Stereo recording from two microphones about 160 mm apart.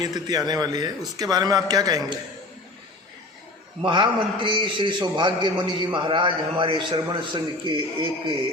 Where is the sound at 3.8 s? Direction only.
30° right (ahead or behind).